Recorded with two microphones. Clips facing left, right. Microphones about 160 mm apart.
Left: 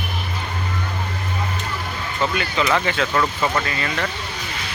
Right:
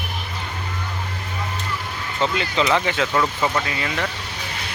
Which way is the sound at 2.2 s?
20° right (ahead or behind).